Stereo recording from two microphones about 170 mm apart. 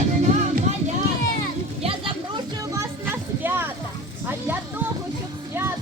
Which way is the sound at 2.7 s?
10° right (ahead or behind).